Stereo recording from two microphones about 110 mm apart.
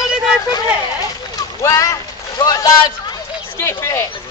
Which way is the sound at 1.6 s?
30° left (ahead or behind).